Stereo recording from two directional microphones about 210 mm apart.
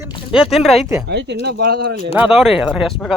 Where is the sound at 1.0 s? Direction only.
55° right (ahead or behind).